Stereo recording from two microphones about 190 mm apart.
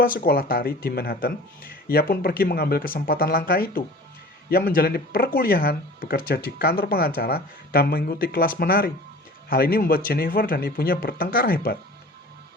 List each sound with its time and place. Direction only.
0.0 s speech: 50° left (ahead or behind)